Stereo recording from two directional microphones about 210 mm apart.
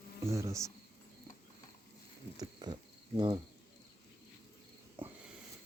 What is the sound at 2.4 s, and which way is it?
Cricket, 20° right (ahead or behind).